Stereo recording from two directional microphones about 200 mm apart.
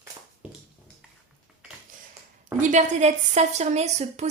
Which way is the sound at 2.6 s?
40° right (ahead or behind).